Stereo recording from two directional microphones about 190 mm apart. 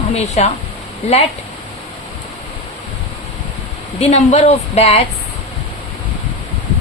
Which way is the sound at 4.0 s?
35° left (ahead or behind).